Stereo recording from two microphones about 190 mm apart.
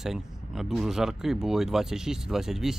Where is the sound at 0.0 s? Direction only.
Centre (ahead or behind).